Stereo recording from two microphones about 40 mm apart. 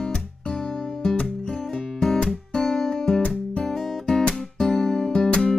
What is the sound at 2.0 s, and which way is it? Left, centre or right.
Music, centre.